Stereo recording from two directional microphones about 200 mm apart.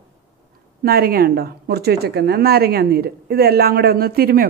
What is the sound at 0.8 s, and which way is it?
A woman's voice, 50° right (ahead or behind).